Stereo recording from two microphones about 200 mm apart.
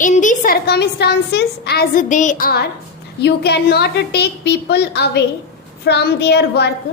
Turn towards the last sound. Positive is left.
turn(degrees=55)  # may be behind; listen again after turning